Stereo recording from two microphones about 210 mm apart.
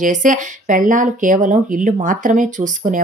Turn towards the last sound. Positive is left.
turn(degrees=-40)  # may be behind; listen again after turning